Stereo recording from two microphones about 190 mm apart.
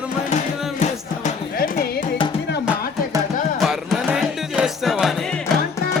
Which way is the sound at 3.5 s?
Centre (ahead or behind).